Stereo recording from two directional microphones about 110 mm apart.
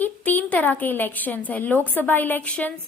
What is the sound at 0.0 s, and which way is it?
A woman's voice, 15° left (ahead or behind).